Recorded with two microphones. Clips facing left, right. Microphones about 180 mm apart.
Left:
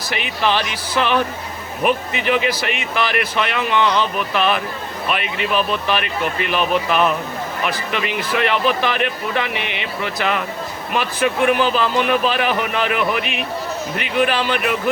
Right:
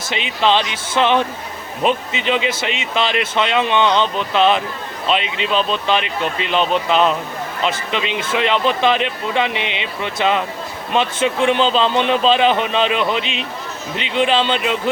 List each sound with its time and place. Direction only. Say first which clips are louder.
0.1 s speech: right 3 dB; 20° right (ahead or behind)